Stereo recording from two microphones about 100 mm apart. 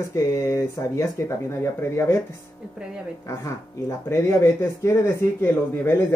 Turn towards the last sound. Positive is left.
turn(degrees=25)  # may be behind; listen again after turning